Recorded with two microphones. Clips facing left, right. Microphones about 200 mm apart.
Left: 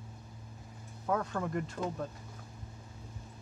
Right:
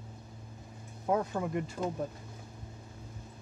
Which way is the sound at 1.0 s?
20° right (ahead or behind).